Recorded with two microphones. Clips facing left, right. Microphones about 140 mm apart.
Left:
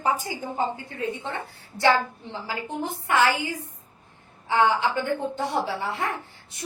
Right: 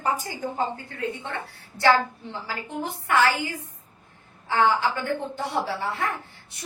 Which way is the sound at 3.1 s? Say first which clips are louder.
Even; 20° left (ahead or behind).